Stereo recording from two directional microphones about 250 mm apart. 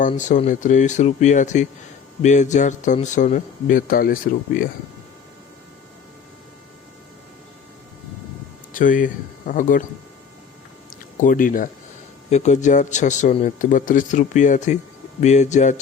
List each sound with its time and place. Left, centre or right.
0.0 s speech: left
8.7 s speech: left
11.2 s speech: left